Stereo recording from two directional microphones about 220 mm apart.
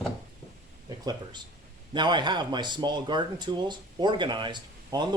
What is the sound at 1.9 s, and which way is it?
Speech, 20° right (ahead or behind).